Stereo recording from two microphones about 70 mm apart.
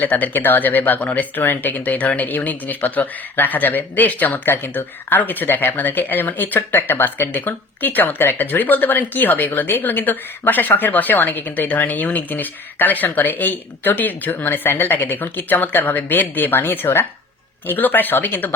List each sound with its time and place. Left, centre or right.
0.0 s speech: left